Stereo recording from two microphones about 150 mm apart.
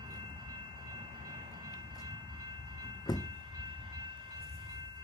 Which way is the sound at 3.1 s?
25° left (ahead or behind).